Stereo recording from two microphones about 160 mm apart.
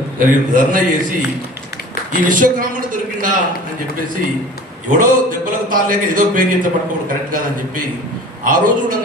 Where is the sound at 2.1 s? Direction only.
55° right (ahead or behind).